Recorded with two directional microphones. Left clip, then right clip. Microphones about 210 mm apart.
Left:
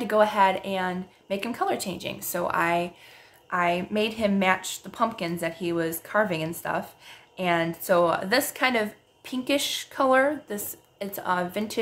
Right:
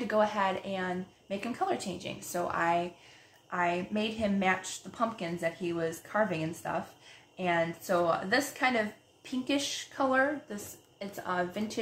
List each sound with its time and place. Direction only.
0.0 s a woman's voice: 40° left (ahead or behind)